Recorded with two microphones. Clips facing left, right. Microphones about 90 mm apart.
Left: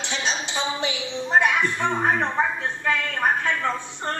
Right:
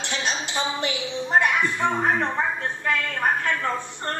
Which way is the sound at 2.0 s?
20° left (ahead or behind).